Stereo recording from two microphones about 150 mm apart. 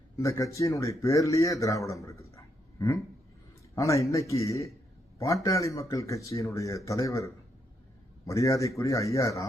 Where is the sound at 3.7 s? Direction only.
20° left (ahead or behind).